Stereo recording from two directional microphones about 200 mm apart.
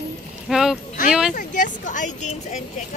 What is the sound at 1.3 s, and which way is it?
Speech, 40° left (ahead or behind).